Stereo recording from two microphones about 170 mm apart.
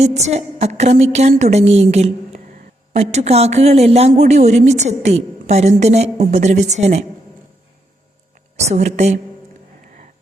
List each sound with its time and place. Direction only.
0.0 s a woman's voice: 40° right (ahead or behind)
8.5 s a woman's voice: 40° right (ahead or behind)